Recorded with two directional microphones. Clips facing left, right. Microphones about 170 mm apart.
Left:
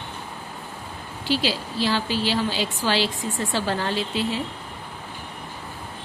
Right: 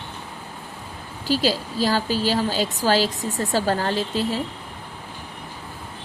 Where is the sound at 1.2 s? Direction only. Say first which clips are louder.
Right 3 dB; 40° right (ahead or behind).